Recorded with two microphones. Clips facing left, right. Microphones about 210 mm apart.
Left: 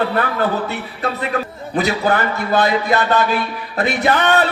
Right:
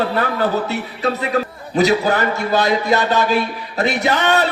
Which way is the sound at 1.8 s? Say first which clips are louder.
Right 2 dB; 55° left (ahead or behind).